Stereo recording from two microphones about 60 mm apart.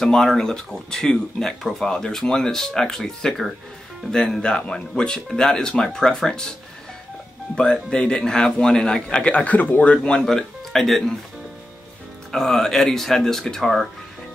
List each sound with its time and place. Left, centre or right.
0.0 s speech: centre
7.5 s speech: centre
10.2 s speech: centre
12.3 s speech: centre